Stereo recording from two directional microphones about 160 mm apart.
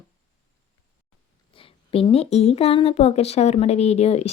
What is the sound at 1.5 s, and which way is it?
A woman's voice, 35° left (ahead or behind).